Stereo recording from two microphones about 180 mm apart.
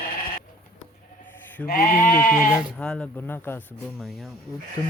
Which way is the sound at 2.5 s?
5° left (ahead or behind).